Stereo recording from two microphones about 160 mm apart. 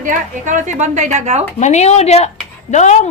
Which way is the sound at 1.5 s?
45° left (ahead or behind).